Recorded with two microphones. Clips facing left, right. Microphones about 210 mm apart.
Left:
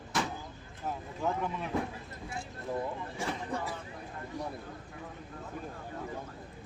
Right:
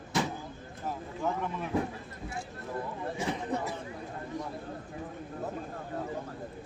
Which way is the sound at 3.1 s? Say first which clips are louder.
Right 7 dB; 20° right (ahead or behind).